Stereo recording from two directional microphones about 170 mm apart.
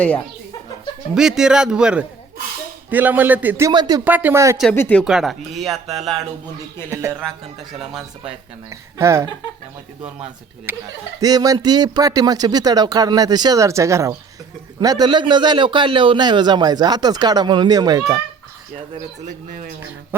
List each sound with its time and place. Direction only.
1.1 s a man's voice: 5° right (ahead or behind)
3.7 s a man's voice: 25° right (ahead or behind)
4.0 s speech: 10° right (ahead or behind)
4.7 s speech: 10° left (ahead or behind)
5.0 s a man's voice: centre (ahead or behind)
6.9 s speech: 15° right (ahead or behind)
8.7 s speech: 15° right (ahead or behind)
10.7 s a man's voice: 10° right (ahead or behind)